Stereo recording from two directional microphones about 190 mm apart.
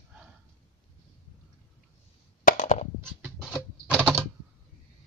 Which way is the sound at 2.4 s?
40° left (ahead or behind).